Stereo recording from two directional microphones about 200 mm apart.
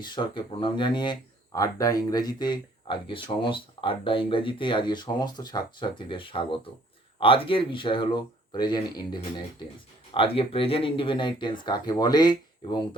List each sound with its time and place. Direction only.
0.0 s speech: 20° left (ahead or behind)